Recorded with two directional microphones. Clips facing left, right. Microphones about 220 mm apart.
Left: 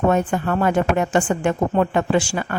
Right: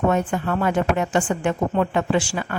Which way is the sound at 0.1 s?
45° left (ahead or behind).